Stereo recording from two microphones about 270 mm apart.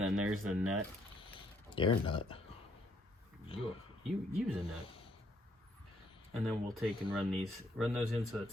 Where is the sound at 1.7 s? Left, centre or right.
Centre.